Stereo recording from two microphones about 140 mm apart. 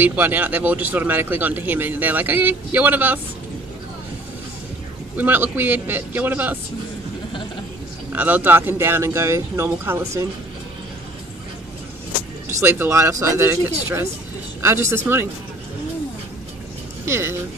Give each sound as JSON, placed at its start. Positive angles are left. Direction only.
{"t": 0.0, "sound": "speech", "side_deg": -15}
{"t": 5.1, "sound": "speech", "side_deg": -15}
{"t": 8.1, "sound": "speech", "side_deg": -10}
{"t": 12.4, "sound": "speech", "side_deg": -20}
{"t": 17.0, "sound": "speech", "side_deg": -20}